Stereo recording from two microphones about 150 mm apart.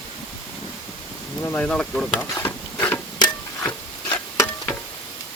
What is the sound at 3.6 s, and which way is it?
Stir, 10° left (ahead or behind).